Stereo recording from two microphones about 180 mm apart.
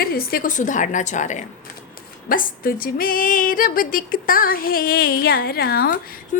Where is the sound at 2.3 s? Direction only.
50° left (ahead or behind).